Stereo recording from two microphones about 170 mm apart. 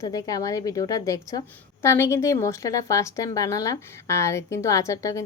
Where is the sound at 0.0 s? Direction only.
20° left (ahead or behind).